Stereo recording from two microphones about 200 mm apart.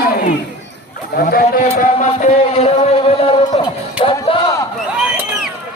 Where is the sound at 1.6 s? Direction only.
35° left (ahead or behind); by 4.7 s 20° left (ahead or behind).